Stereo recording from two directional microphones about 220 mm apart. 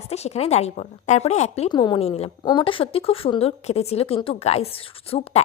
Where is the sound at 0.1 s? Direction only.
30° left (ahead or behind).